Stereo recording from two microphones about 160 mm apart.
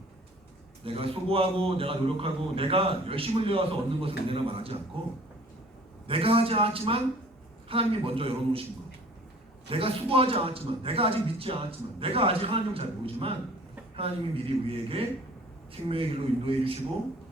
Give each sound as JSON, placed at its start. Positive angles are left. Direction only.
{"t": 0.9, "sound": "a man's voice", "side_deg": -35}
{"t": 6.1, "sound": "a man's voice", "side_deg": -35}
{"t": 9.6, "sound": "a man's voice", "side_deg": -35}